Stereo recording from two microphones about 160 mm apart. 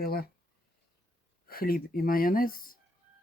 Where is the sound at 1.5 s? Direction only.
65° left (ahead or behind).